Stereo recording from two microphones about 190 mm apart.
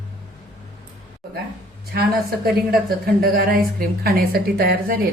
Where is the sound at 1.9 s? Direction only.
55° right (ahead or behind).